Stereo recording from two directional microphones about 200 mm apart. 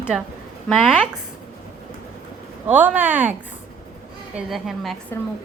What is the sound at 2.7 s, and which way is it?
Speech, 10° right (ahead or behind).